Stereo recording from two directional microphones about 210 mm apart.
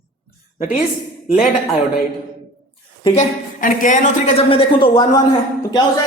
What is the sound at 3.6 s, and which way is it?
Speech, 40° left (ahead or behind).